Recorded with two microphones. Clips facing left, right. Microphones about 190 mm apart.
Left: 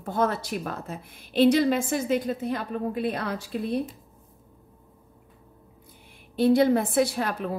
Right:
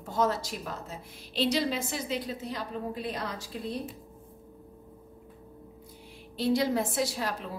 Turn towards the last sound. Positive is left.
turn(degrees=55)  # may be behind; listen again after turning